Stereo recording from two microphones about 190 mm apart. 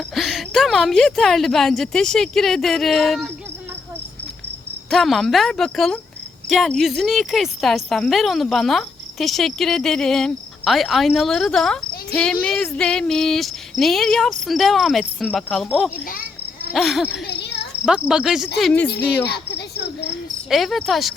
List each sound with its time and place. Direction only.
0.1 s speech: centre (ahead or behind)
4.9 s speech: centre (ahead or behind)
17.2 s cricket: 60° left (ahead or behind)
17.8 s speech: 5° right (ahead or behind)
18.6 s speech: 10° left (ahead or behind)
19.2 s cricket: 60° left (ahead or behind)
20.5 s speech: centre (ahead or behind)